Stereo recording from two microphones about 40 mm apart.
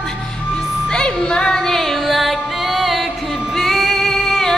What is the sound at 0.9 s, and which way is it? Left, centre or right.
Music, left.